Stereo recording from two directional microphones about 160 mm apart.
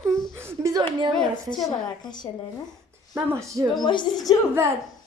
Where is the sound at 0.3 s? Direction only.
15° right (ahead or behind).